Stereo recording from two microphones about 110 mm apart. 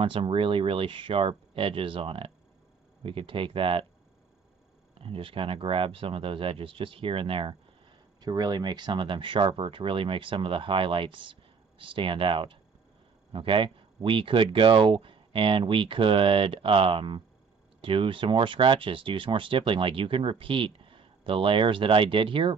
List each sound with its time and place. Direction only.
0.0 s speech: 50° right (ahead or behind)
5.0 s speech: 55° right (ahead or behind)
8.2 s speech: 40° right (ahead or behind)